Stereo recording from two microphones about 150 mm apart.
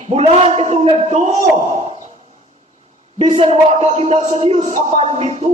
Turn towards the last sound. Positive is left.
turn(degrees=-45)  # may be behind; listen again after turning